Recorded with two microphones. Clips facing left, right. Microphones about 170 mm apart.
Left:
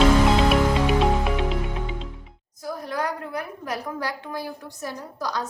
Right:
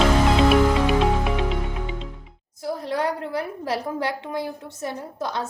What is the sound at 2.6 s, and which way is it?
A woman's voice, 30° right (ahead or behind).